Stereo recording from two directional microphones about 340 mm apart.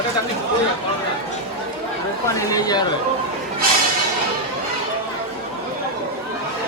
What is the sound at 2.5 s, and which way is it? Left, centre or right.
Speech, centre.